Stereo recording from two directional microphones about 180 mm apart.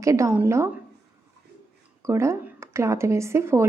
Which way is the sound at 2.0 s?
15° right (ahead or behind).